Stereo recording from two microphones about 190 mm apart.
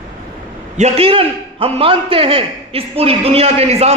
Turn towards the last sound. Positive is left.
turn(degrees=-35)  # may be behind; listen again after turning